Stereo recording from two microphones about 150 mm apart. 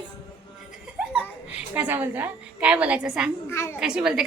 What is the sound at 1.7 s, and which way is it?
A woman's voice, 10° right (ahead or behind).